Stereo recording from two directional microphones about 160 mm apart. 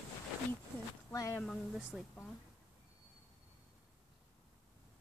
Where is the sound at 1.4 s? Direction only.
Centre (ahead or behind).